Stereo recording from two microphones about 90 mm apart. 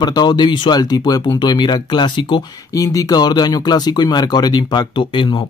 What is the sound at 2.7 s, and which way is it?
Speech, 40° left (ahead or behind).